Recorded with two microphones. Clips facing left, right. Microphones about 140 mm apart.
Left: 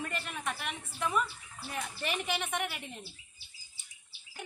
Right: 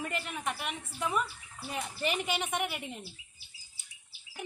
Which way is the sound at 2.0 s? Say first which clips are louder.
Right 3 dB; 5° right (ahead or behind).